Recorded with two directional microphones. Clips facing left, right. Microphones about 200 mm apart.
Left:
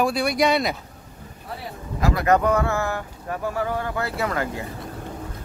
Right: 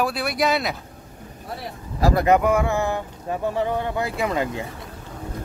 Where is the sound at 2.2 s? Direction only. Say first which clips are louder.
Left 1 dB; 10° right (ahead or behind).